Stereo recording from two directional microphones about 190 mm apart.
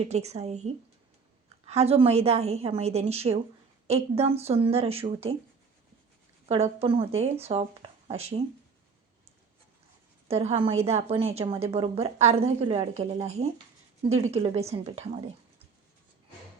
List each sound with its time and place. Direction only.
0.1 s a woman's voice: 35° right (ahead or behind)
6.5 s a woman's voice: 30° right (ahead or behind)
10.2 s a woman's voice: 30° right (ahead or behind)